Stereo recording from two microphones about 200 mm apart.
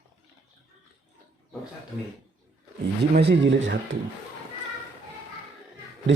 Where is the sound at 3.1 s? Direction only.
55° right (ahead or behind).